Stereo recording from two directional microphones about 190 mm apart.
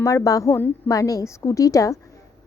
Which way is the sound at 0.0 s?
15° left (ahead or behind).